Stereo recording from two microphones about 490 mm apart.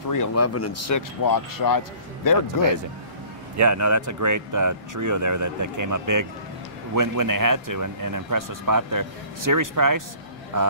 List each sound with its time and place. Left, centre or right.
0.1 s speech: left
3.5 s speech: right